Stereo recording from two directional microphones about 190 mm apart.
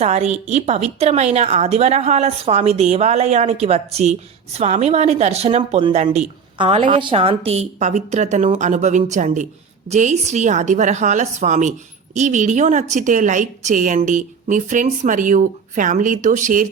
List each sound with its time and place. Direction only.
0.0 s a woman's voice: 35° right (ahead or behind)